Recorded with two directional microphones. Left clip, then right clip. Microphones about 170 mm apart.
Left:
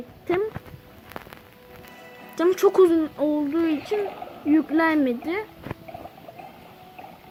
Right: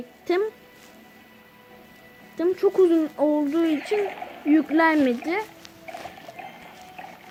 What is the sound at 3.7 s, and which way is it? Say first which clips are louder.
Speech: right 1 dB; 5° right (ahead or behind).